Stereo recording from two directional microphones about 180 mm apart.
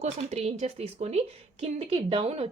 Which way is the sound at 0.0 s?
35° right (ahead or behind).